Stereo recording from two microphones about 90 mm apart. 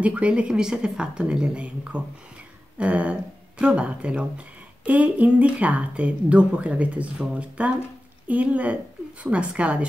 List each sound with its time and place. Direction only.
0.0 s speech: 15° right (ahead or behind)